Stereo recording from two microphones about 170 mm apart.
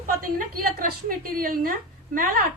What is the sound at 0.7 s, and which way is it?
A woman's voice, 60° right (ahead or behind).